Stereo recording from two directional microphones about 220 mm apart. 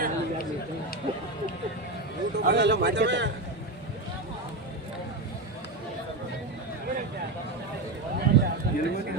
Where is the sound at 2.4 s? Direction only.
50° right (ahead or behind).